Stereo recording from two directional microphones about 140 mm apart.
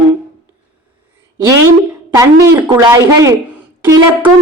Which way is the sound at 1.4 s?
20° right (ahead or behind).